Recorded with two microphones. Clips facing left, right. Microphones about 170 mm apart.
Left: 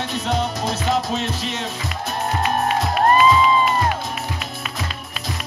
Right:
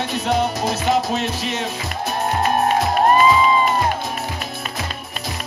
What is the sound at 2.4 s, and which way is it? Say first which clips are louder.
Music: right 3 dB; 45° right (ahead or behind).